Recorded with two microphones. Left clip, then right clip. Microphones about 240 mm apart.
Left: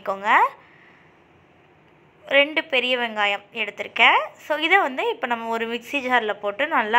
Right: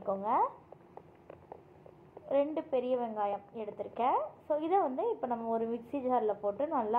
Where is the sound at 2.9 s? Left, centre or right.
Left.